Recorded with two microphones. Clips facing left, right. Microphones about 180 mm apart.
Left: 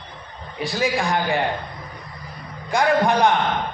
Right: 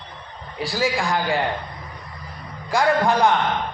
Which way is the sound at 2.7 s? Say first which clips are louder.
Even; 20° left (ahead or behind).